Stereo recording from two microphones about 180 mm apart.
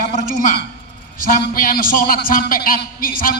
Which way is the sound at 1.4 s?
55° left (ahead or behind).